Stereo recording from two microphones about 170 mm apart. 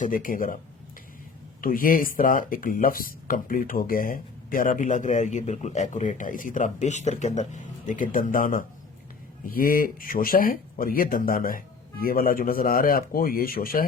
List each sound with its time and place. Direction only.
0.0 s speech: 55° left (ahead or behind)
1.6 s speech: 55° left (ahead or behind)